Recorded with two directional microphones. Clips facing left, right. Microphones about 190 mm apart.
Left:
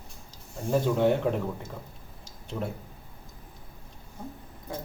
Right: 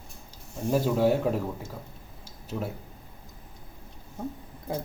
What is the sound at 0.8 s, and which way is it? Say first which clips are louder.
Speech: even; 5° right (ahead or behind).